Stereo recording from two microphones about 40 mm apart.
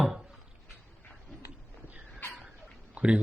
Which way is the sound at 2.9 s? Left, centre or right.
Right.